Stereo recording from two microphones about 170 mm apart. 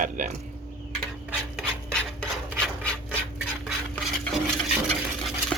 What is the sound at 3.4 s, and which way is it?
Stir, centre (ahead or behind).